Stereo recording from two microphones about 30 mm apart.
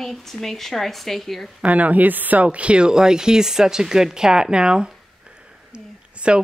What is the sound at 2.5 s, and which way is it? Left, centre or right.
Speech, right.